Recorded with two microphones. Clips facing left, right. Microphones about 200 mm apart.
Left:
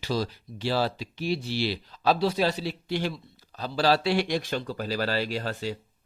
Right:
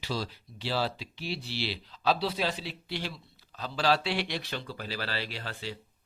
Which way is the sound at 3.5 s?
35° left (ahead or behind).